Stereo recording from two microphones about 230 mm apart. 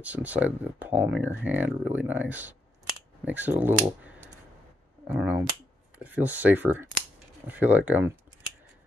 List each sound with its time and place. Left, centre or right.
0.0 s speech: centre